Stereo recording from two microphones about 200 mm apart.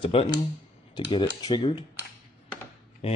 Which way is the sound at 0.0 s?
30° left (ahead or behind).